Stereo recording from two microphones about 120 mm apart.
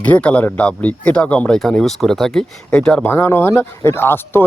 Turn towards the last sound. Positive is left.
turn(degrees=20)  # may be behind; listen again after turning